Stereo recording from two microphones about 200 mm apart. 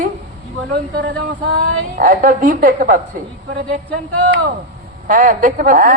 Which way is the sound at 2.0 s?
40° right (ahead or behind).